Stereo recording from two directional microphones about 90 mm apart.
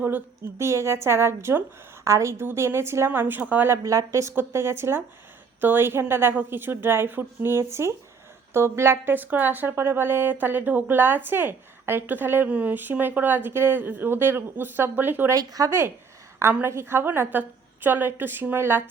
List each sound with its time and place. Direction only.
0.6 s a woman's voice: 30° right (ahead or behind); by 3.7 s 15° right (ahead or behind)
3.7 s a woman's voice: 35° right (ahead or behind)
15.3 s speech: 40° right (ahead or behind)
16.5 s a woman's voice: 25° right (ahead or behind)